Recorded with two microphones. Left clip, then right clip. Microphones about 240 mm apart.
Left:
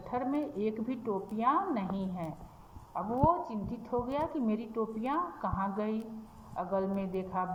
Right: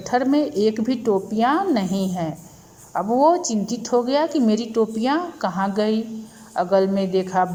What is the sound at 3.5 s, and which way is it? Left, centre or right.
A woman's voice, right.